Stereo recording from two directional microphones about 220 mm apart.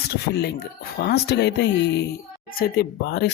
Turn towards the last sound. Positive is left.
turn(degrees=50)  # may be behind; listen again after turning